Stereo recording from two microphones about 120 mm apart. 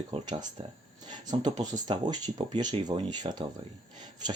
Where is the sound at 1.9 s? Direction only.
50° right (ahead or behind).